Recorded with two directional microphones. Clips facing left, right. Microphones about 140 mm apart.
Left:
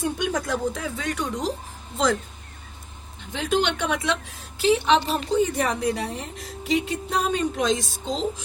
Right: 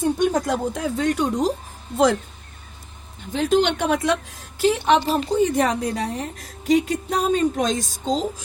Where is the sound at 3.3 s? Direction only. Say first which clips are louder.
Right 5 dB; 45° right (ahead or behind).